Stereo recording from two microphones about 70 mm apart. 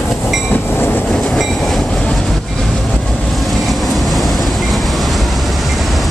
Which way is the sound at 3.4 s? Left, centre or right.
Centre.